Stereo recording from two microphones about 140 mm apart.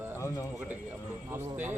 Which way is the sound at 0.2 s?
20° left (ahead or behind).